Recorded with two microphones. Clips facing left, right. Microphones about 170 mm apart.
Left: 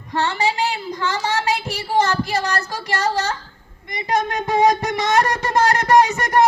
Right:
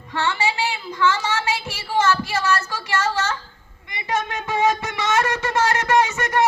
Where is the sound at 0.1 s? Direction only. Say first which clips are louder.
Left 2 dB; 40° left (ahead or behind).